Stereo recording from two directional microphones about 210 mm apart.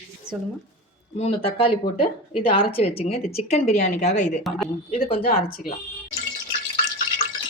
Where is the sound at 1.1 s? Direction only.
30° left (ahead or behind).